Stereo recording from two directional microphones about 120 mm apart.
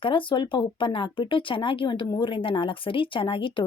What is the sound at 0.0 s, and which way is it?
A woman's voice, 45° left (ahead or behind).